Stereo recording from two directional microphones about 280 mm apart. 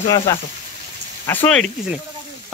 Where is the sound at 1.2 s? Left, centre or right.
Centre.